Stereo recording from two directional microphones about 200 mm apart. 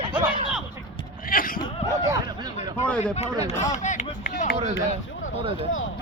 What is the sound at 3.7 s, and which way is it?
Speech, 35° left (ahead or behind).